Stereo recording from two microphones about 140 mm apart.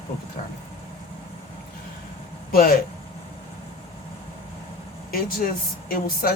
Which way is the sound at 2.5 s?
90° left.